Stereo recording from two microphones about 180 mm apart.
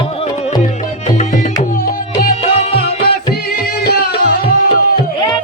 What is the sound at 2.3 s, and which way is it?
Music, 40° left (ahead or behind).